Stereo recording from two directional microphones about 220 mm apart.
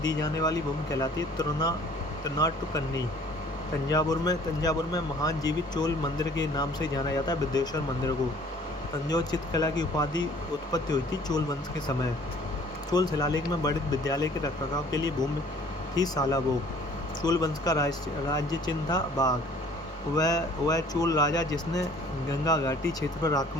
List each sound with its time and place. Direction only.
0.0 s speech: 15° left (ahead or behind)
13.1 s speech: 20° left (ahead or behind)